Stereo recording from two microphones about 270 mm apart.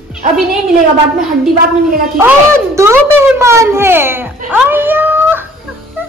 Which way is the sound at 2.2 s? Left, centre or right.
Centre.